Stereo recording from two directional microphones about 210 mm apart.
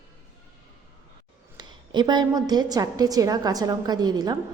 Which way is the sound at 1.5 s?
20° right (ahead or behind).